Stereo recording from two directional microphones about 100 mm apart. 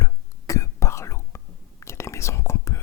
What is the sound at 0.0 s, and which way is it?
Whispering, 30° left (ahead or behind).